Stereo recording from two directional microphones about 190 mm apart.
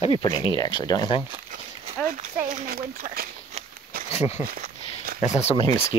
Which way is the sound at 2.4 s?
45° right (ahead or behind).